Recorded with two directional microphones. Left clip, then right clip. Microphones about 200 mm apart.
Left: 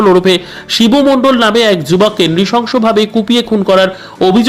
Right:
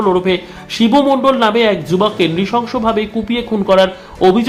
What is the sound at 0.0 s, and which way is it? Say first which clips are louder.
A man's voice: left 6 dB; 25° left (ahead or behind).